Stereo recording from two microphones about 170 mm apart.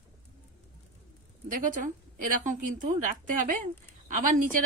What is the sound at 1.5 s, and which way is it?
A woman's voice, 50° right (ahead or behind).